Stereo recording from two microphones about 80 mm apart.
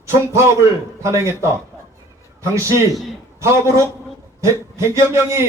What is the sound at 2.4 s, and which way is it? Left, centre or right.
A man's voice, right.